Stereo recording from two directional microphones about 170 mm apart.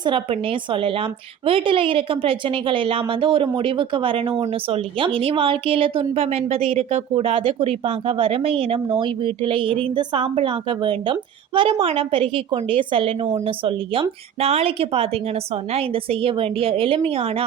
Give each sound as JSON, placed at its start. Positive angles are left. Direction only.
{"t": 0.0, "sound": "a woman's voice", "side_deg": -30}